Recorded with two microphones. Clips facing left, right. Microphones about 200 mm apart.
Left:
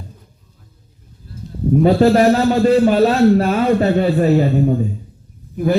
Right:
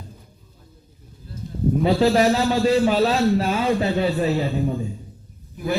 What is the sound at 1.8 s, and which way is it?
A man's voice, 50° left (ahead or behind).